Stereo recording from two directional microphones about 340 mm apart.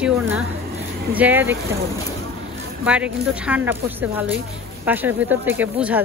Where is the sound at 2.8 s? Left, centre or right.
Centre.